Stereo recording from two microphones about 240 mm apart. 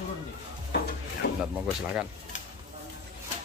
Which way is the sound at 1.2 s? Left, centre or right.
Left.